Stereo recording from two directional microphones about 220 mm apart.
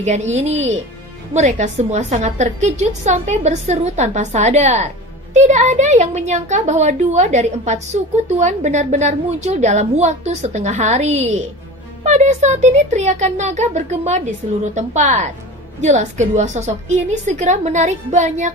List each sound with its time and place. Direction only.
0.0 s a woman's voice: 30° right (ahead or behind)